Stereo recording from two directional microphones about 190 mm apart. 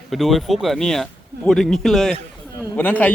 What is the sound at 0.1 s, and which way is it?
A man's voice, centre (ahead or behind).